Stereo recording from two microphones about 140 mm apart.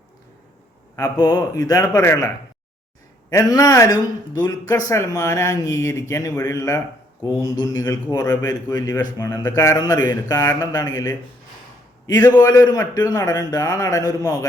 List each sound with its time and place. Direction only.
0.9 s a man's voice: 25° left (ahead or behind)